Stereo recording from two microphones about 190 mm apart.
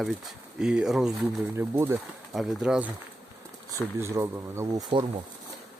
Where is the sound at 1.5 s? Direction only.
15° right (ahead or behind).